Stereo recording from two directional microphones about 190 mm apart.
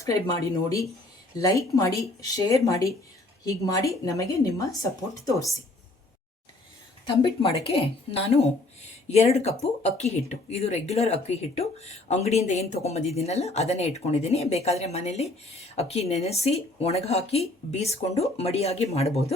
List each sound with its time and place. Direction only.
0.0 s speech: 15° left (ahead or behind)
7.1 s a woman's voice: 25° left (ahead or behind)